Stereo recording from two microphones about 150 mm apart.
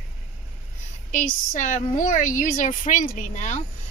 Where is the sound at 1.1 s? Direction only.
55° left (ahead or behind).